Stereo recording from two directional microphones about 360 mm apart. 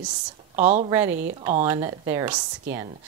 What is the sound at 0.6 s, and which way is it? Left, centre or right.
Speech, centre.